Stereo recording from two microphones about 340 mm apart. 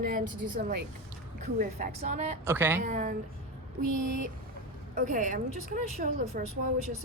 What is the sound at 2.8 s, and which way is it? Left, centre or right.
Speech, right.